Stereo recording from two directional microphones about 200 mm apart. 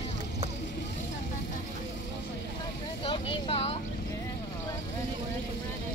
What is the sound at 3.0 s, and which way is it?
Vehicle, 25° left (ahead or behind).